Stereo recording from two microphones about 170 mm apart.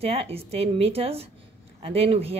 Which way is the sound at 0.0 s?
35° right (ahead or behind).